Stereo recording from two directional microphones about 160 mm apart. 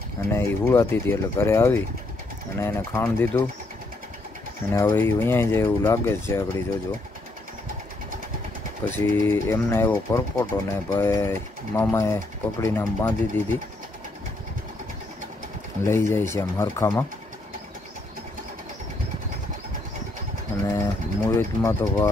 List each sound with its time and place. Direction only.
0.3 s speech: 15° left (ahead or behind)
4.7 s speech: 15° left (ahead or behind)
8.8 s speech: 15° left (ahead or behind)
15.8 s speech: 15° left (ahead or behind)
20.6 s speech: 20° left (ahead or behind)